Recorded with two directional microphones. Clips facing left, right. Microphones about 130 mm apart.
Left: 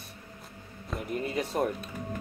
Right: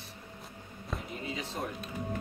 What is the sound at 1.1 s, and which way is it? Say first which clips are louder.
Music: left 11 dB; 55° left (ahead or behind).